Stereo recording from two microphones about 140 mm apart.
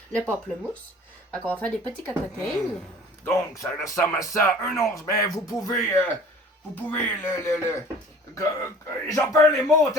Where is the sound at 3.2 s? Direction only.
20° left (ahead or behind).